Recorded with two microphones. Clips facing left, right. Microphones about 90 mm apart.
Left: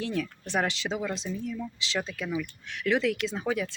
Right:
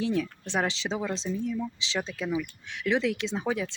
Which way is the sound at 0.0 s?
25° right (ahead or behind).